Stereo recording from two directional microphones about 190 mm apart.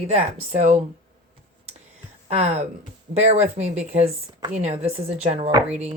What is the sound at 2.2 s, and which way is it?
Speech, 35° right (ahead or behind).